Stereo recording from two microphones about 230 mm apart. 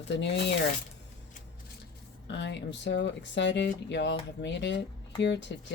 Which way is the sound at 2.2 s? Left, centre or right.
Left.